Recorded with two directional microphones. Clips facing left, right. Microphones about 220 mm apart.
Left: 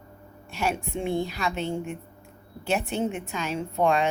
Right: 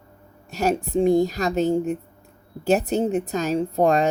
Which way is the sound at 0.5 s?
40° right (ahead or behind).